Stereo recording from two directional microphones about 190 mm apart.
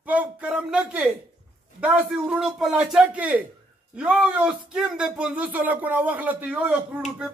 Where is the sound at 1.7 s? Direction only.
5° right (ahead or behind).